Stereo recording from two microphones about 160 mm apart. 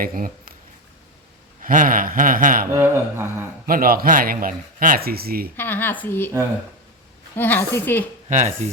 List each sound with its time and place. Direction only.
0.0 s speech: 60° right (ahead or behind)
1.6 s speech: 55° right (ahead or behind)
2.7 s speech: 15° right (ahead or behind)
3.7 s speech: 65° right (ahead or behind)
5.5 s speech: 10° left (ahead or behind)
7.3 s speech: 10° left (ahead or behind)
8.3 s speech: 50° right (ahead or behind)